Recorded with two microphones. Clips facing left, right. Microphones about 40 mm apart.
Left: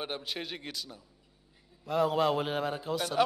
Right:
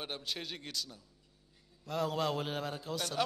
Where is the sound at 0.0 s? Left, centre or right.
Centre.